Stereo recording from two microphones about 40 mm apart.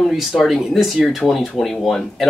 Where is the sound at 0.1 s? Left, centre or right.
Centre.